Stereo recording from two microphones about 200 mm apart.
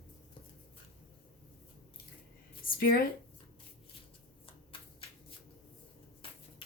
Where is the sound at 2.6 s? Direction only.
45° left (ahead or behind).